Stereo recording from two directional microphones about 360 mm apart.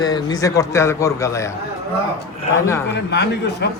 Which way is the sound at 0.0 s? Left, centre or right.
Centre.